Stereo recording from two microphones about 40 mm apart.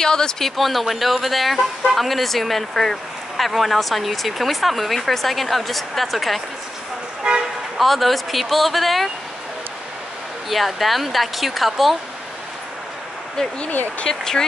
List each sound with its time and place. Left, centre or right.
0.0 s speech: centre
0.6 s speech: centre
7.2 s speech: right
7.7 s speech: centre
10.5 s speech: centre
13.7 s speech: left
14.0 s speech: centre